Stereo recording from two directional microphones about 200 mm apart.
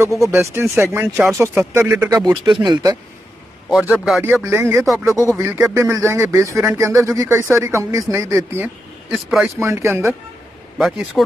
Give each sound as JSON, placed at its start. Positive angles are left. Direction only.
{"t": 0.2, "sound": "speech", "side_deg": -15}
{"t": 2.4, "sound": "speech", "side_deg": -25}
{"t": 3.9, "sound": "speech", "side_deg": 0}
{"t": 4.2, "sound": "speech", "side_deg": -10}
{"t": 5.4, "sound": "speech", "side_deg": -10}
{"t": 9.1, "sound": "speech", "side_deg": 0}
{"t": 9.6, "sound": "speech", "side_deg": -15}
{"t": 10.8, "sound": "speech", "side_deg": 0}